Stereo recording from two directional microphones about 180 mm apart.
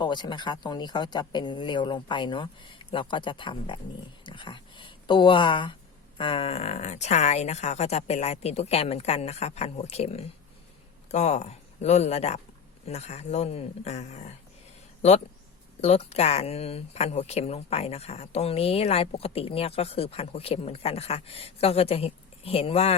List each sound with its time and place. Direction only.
0.0 s speech: 25° left (ahead or behind)
15.8 s speech: 35° left (ahead or behind)